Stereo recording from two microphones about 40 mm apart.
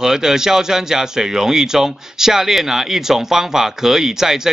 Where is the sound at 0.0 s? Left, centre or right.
Centre.